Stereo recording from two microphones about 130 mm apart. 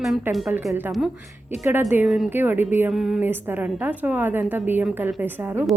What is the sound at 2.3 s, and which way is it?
Speech, 15° right (ahead or behind).